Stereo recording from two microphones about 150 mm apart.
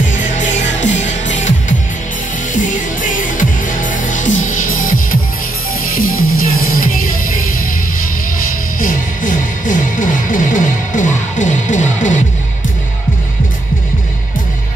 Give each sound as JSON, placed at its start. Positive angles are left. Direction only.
{"t": 0.1, "sound": "music", "side_deg": 55}
{"t": 8.7, "sound": "music", "side_deg": 65}